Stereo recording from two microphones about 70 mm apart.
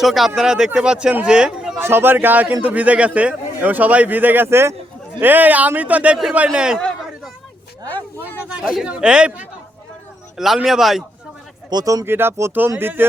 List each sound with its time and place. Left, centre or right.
0.0 s a man's voice: centre
1.8 s a man's voice: right
4.4 s speech: right
5.2 s a man's voice: right
8.4 s a man's voice: centre
10.3 s a man's voice: centre
11.7 s speech: right
12.0 s speech: right